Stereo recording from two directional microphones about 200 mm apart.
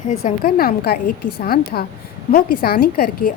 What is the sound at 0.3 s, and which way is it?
A woman's voice, 50° left (ahead or behind).